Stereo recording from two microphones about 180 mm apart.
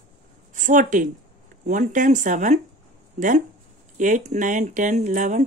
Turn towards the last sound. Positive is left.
turn(degrees=-45)  # may be behind; listen again after turning